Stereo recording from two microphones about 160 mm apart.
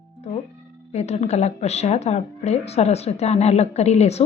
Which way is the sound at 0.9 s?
40° left (ahead or behind).